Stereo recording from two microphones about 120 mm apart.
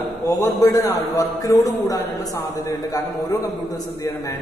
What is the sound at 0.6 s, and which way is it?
A man's voice, 30° left (ahead or behind).